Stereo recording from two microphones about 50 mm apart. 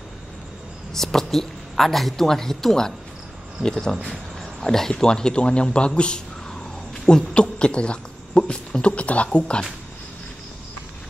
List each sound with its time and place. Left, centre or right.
0.9 s speech: centre